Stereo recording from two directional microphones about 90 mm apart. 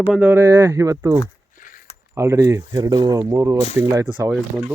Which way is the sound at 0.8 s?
40° right (ahead or behind).